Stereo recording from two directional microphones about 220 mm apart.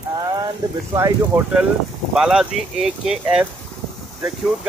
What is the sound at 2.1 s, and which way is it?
Speech, 5° right (ahead or behind).